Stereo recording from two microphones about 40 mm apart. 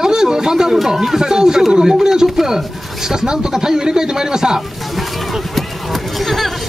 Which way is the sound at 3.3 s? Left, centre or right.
Centre.